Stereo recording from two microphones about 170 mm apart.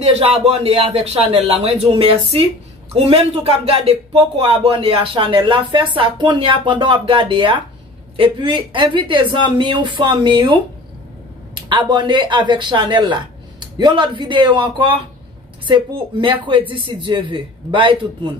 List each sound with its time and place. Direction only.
0.0 s speech: 35° right (ahead or behind)